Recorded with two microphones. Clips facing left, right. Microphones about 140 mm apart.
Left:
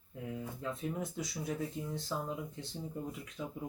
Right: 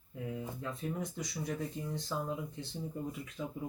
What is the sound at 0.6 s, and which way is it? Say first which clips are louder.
Speech: left 2 dB; centre (ahead or behind).